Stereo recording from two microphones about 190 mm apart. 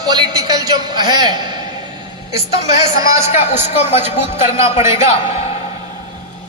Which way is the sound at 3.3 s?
35° left (ahead or behind).